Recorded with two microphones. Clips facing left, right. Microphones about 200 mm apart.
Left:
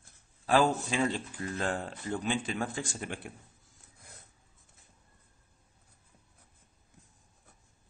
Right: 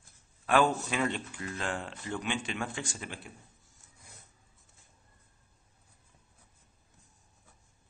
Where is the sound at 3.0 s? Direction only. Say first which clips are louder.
Left 4 dB; 50° left (ahead or behind).